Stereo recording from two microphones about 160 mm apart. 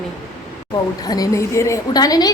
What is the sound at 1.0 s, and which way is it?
A woman's voice, 25° left (ahead or behind).